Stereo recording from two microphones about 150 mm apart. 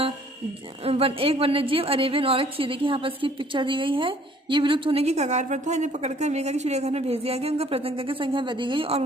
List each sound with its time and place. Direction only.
0.9 s a woman's voice: 40° right (ahead or behind)